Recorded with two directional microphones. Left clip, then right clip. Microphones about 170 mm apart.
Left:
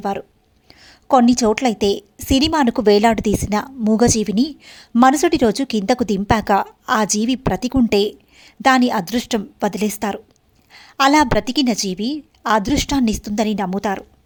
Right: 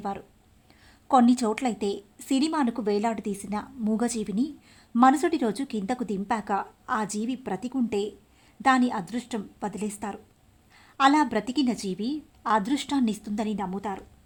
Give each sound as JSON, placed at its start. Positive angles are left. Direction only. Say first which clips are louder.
{"t": 0.0, "sound": "a woman's voice", "louder": "left 10 dB", "side_deg": 40}